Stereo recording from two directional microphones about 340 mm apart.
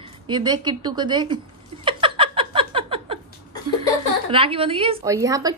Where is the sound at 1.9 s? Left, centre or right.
Centre.